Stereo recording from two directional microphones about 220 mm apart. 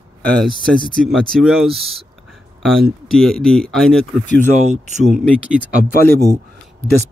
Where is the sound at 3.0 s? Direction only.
Centre (ahead or behind).